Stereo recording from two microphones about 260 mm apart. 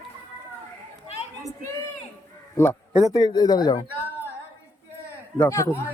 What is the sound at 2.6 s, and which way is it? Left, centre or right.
A man's voice, centre.